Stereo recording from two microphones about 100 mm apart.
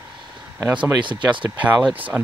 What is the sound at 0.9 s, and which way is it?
Speech, 50° right (ahead or behind).